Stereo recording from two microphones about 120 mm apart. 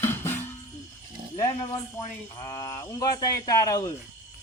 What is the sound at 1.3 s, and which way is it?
Speech, 30° left (ahead or behind).